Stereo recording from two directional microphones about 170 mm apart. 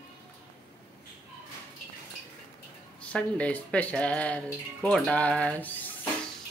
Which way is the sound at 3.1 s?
5° left (ahead or behind).